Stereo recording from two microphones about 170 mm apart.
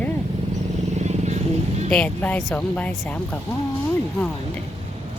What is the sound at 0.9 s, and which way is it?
Vehicle, 40° right (ahead or behind).